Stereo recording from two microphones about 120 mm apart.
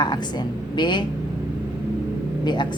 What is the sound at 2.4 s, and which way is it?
Speech, 40° left (ahead or behind).